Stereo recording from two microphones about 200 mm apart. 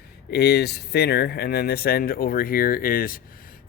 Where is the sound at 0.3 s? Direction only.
55° left (ahead or behind).